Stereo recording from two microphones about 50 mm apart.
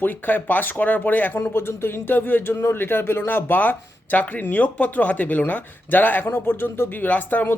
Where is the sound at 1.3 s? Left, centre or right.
Left.